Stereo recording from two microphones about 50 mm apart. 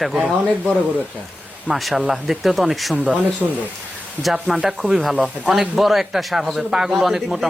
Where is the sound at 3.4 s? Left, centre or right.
Centre.